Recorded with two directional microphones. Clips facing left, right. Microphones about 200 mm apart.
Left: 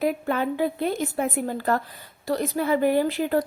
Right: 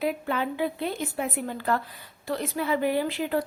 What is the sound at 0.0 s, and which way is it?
A woman's voice, 45° left (ahead or behind).